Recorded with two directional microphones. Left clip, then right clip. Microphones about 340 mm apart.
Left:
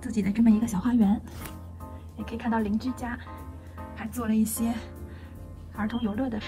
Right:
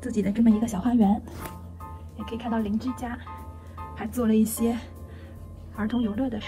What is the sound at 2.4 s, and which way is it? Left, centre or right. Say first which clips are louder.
Speech: left 1 dB; centre.